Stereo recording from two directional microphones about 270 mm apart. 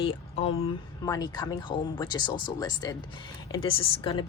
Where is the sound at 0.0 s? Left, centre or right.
Left.